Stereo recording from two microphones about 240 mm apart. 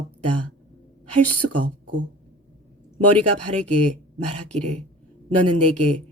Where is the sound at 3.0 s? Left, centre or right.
Right.